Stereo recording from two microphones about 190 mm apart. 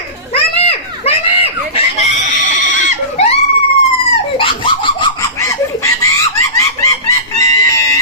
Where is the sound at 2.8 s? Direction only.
35° left (ahead or behind).